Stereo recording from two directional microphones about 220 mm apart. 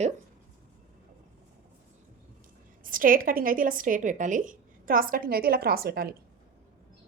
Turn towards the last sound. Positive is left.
turn(degrees=-45)  # may be behind; listen again after turning